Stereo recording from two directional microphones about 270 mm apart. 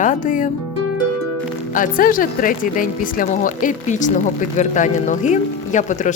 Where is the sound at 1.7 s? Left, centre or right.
Left.